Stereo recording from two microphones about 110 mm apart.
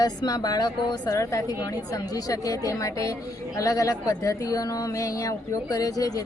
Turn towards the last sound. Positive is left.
turn(degrees=35)  # may be behind; listen again after turning